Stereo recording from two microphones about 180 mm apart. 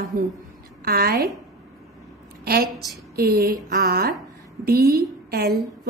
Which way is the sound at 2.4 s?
60° right (ahead or behind).